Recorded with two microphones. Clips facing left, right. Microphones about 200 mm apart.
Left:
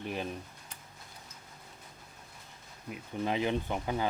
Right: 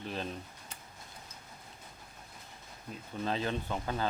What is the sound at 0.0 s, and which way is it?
Speech, 15° left (ahead or behind).